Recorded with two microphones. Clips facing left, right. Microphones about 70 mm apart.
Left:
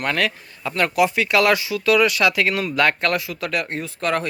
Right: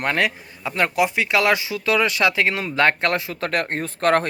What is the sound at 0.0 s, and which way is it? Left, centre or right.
Speech, right.